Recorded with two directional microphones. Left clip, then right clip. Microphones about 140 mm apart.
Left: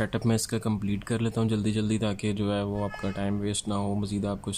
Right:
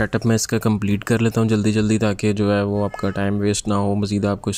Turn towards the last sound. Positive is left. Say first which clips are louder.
# right 10 dB
turn(degrees=-45)  # may be behind; listen again after turning